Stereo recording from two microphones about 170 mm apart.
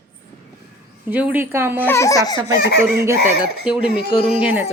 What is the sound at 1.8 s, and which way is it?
Speech, 15° left (ahead or behind).